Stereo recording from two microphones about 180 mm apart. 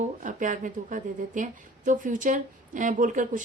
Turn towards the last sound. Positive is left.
turn(degrees=-45)  # may be behind; listen again after turning